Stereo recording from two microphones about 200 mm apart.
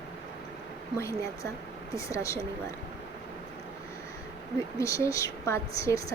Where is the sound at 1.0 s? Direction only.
15° left (ahead or behind).